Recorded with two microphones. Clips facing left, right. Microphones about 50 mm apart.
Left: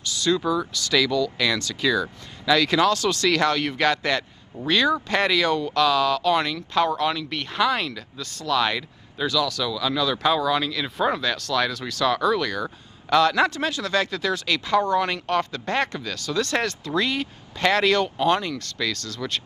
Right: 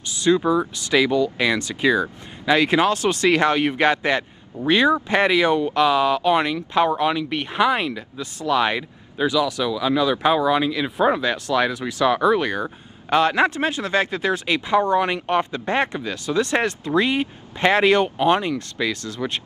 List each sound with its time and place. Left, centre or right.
0.0 s speech: right